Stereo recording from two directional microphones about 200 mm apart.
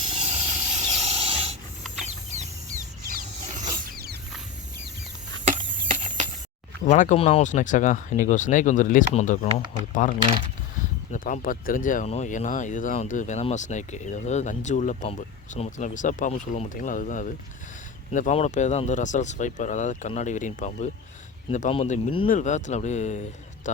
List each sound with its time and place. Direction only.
0.1 s rub: 35° right (ahead or behind); by 4.2 s 50° right (ahead or behind)
5.9 s a sound: 40° right (ahead or behind)
6.8 s speech: 40° left (ahead or behind)